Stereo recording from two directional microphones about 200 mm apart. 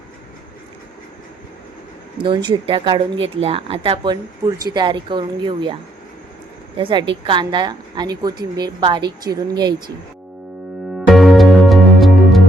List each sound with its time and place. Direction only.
2.1 s speech: 25° right (ahead or behind)
6.7 s speech: 25° right (ahead or behind)
10.9 s music: centre (ahead or behind)